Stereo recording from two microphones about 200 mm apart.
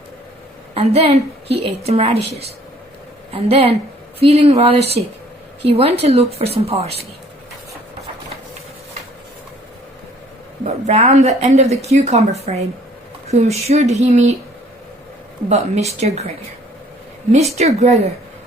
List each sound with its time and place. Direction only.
0.7 s a woman's voice: 30° right (ahead or behind)
3.3 s a woman's voice: 30° right (ahead or behind)
10.8 s a woman's voice: 30° right (ahead or behind)
15.4 s a woman's voice: 35° right (ahead or behind)
17.6 s a woman's voice: 35° right (ahead or behind)